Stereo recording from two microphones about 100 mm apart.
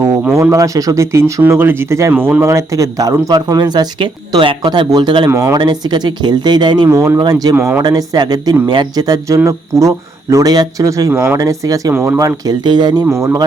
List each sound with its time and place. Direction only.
0.5 s speech: 35° right (ahead or behind)
5.3 s speech: 35° right (ahead or behind)
5.5 s speech: 45° right (ahead or behind)
6.8 s speech: 30° right (ahead or behind)
7.5 s speech: 20° right (ahead or behind)
7.8 s speech: 40° right (ahead or behind)
11.1 s speech: 25° right (ahead or behind)
11.3 s speech: 35° right (ahead or behind)
12.5 s speech: 45° right (ahead or behind)
13.1 s speech: 30° right (ahead or behind)